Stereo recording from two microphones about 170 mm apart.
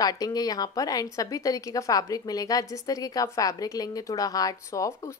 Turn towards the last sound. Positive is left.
turn(degrees=20)  # may be behind; listen again after turning